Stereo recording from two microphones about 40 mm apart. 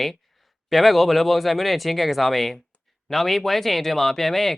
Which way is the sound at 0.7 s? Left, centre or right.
Centre.